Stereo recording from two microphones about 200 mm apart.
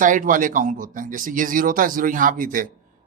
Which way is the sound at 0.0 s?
40° right (ahead or behind).